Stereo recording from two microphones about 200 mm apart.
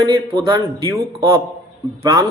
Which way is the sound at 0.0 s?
20° right (ahead or behind).